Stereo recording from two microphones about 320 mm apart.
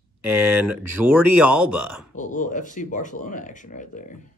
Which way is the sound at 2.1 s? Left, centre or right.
Left.